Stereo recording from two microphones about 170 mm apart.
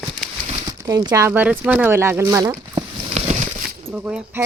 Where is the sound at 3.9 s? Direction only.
10° right (ahead or behind).